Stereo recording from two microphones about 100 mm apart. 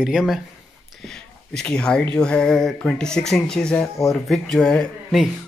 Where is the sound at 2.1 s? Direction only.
10° left (ahead or behind).